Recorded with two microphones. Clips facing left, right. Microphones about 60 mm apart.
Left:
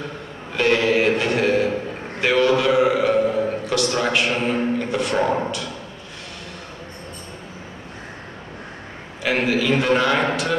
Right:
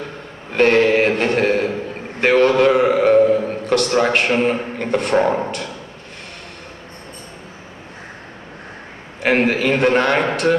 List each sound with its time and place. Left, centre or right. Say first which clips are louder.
0.5 s a man's voice: right 5 dB; right
2.1 s a sound: right 4 dB; right
3.6 s a man's voice: right 5 dB; right
9.2 s a man's voice: right 4 dB; right